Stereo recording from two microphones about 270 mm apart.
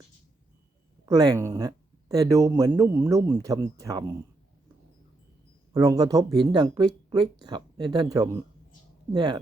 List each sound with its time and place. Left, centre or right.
1.0 s speech: centre
5.7 s speech: centre